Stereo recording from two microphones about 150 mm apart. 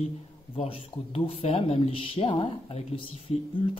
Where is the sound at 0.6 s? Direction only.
40° left (ahead or behind).